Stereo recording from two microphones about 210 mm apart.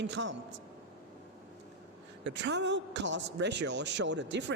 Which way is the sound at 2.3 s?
55° right (ahead or behind).